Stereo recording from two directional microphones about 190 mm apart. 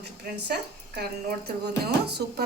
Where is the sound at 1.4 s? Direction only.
60° right (ahead or behind).